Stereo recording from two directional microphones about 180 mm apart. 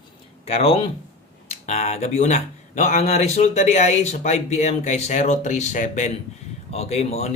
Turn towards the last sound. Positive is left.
turn(degrees=35)  # may be behind; listen again after turning